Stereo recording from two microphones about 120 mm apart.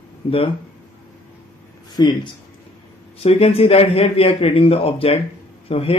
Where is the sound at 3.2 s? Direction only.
55° left (ahead or behind).